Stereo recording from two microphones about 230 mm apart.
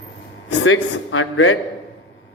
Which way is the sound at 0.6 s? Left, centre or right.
Left.